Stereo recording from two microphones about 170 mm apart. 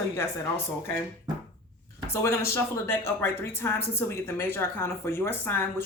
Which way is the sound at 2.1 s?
15° left (ahead or behind).